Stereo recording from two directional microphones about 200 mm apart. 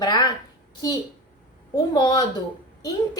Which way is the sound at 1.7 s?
20° left (ahead or behind).